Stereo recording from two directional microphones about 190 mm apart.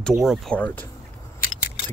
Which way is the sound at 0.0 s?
Centre (ahead or behind).